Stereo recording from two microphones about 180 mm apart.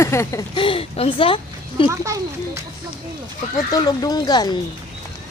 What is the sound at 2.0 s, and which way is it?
Speech, 15° right (ahead or behind).